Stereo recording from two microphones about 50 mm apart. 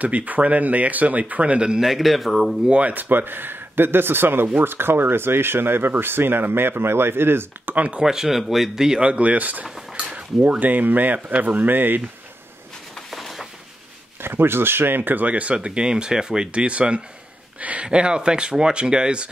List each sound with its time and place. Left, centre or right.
0.0 s speech: right
1.8 s speech: centre
2.7 s speech: right
7.7 s speech: right
8.0 s speech: centre
9.0 s speech: right
13.1 s a sound: centre
14.2 s speech: right
17.8 s speech: centre